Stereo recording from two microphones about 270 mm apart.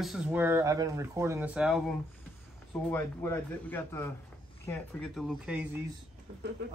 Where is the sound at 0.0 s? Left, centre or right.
Centre.